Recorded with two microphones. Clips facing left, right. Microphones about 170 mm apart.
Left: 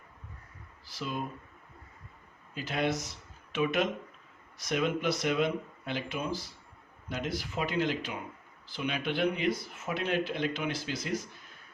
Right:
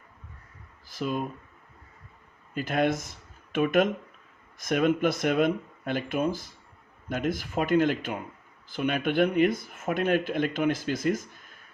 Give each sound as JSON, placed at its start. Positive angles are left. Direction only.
{"t": 0.9, "sound": "speech", "side_deg": -50}
{"t": 2.6, "sound": "speech", "side_deg": -50}